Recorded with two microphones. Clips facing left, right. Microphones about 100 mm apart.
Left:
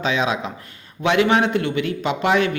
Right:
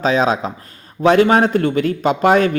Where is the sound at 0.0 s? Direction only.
40° right (ahead or behind).